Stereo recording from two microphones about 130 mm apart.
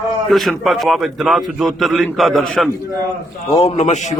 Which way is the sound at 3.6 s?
60° left (ahead or behind).